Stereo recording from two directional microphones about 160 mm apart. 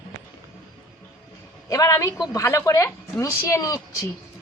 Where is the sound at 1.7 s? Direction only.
20° left (ahead or behind).